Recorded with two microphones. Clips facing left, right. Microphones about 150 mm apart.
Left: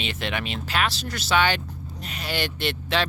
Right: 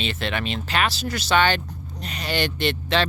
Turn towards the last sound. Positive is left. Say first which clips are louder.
# right 3 dB
turn(degrees=5)  # may be behind; listen again after turning